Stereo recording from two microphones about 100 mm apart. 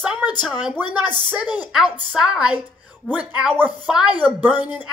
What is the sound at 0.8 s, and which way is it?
Speech, 45° left (ahead or behind).